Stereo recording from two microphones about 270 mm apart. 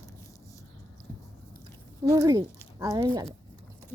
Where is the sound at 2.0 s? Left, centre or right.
Centre.